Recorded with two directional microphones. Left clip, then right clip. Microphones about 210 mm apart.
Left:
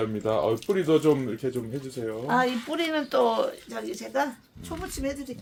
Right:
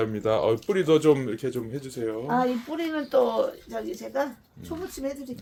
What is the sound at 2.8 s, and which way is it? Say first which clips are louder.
Speech: left 6 dB; 25° left (ahead or behind).